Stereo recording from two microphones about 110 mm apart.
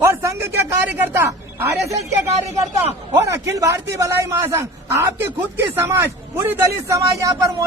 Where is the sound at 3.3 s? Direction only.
30° right (ahead or behind).